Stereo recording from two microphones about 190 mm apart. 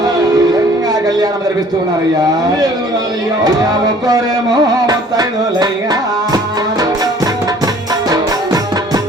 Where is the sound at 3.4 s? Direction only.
20° right (ahead or behind).